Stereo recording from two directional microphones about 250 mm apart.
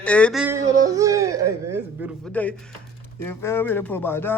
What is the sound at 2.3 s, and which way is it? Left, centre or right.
A man's voice, centre.